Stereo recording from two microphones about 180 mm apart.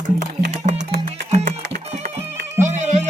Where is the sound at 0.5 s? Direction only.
40° right (ahead or behind).